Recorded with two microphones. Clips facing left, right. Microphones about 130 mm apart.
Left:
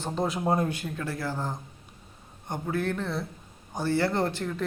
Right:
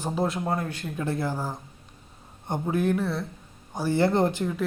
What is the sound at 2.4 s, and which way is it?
A woman's voice, 20° right (ahead or behind).